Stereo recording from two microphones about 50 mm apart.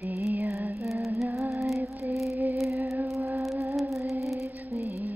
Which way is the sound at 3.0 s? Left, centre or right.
Right.